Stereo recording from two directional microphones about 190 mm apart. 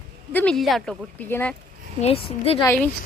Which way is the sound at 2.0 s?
30° left (ahead or behind).